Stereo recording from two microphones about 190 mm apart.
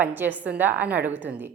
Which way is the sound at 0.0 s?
10° right (ahead or behind).